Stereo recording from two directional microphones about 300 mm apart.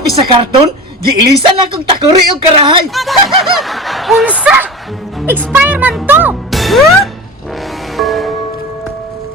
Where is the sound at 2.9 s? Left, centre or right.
Centre.